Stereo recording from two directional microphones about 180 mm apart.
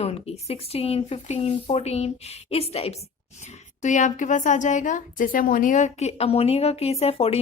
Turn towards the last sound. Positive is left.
turn(degrees=35)  # may be behind; listen again after turning